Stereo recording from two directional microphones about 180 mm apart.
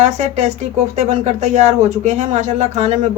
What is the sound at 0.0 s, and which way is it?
Speech, 40° right (ahead or behind).